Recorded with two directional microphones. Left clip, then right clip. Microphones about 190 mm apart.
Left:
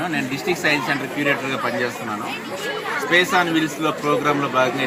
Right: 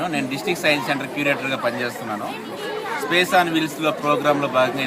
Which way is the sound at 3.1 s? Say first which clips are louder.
Even; 35° right (ahead or behind).